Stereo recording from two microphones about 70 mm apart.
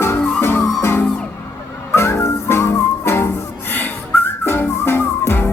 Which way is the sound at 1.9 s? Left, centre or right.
Left.